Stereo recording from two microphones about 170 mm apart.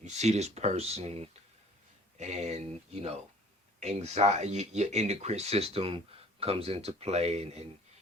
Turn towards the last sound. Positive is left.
turn(degrees=-40)  # may be behind; listen again after turning